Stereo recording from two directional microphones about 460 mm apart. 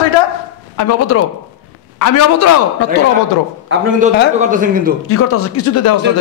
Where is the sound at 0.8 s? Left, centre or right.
Left.